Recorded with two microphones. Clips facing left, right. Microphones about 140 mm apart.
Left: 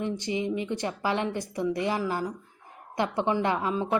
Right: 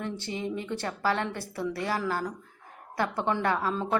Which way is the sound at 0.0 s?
15° left (ahead or behind).